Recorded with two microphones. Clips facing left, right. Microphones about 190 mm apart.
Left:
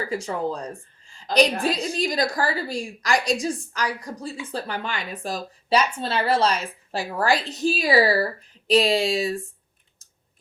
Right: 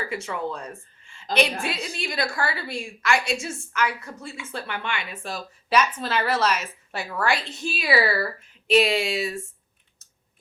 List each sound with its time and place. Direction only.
0.1 s speech: 35° left (ahead or behind)